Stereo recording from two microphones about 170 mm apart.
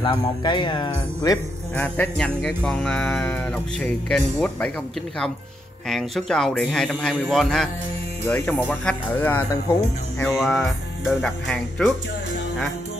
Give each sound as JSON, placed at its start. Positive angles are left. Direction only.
{"t": 0.0, "sound": "speech", "side_deg": 25}
{"t": 1.8, "sound": "music", "side_deg": 5}
{"t": 5.9, "sound": "a man's voice", "side_deg": 0}
{"t": 8.2, "sound": "music", "side_deg": 15}
{"t": 10.4, "sound": "music", "side_deg": 0}
{"t": 11.1, "sound": "a man's voice", "side_deg": 5}